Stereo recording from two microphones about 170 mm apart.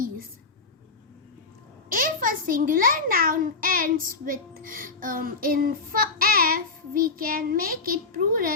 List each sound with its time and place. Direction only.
1.9 s a child's voice: 55° right (ahead or behind)